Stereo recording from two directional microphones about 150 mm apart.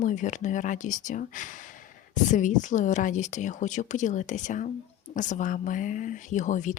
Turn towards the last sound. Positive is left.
turn(degrees=55)  # may be behind; listen again after turning